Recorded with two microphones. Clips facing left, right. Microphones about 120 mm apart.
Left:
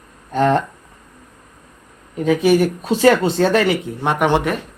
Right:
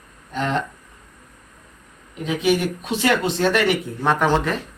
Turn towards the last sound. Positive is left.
turn(degrees=15)  # may be behind; listen again after turning